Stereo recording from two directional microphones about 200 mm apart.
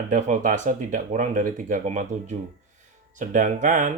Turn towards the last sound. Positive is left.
turn(degrees=-40)  # may be behind; listen again after turning